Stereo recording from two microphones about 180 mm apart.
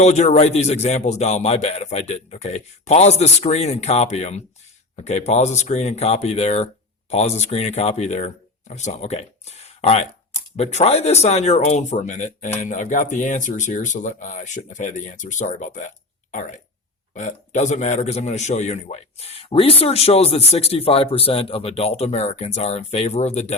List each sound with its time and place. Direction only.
0.0 s a man's voice: 40° left (ahead or behind)